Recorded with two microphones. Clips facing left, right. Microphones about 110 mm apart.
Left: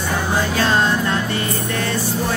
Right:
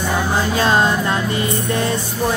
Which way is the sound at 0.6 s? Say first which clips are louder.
Right 2 dB; 15° right (ahead or behind).